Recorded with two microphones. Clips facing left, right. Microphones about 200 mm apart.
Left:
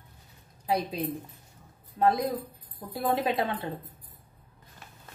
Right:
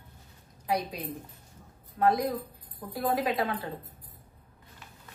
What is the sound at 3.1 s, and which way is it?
Speech, 25° left (ahead or behind).